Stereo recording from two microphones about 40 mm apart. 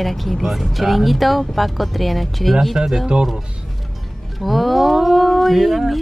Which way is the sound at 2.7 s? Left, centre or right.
Centre.